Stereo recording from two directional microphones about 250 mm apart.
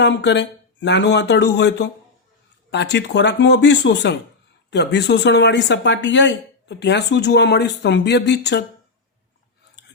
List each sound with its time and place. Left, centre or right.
0.0 s speech: left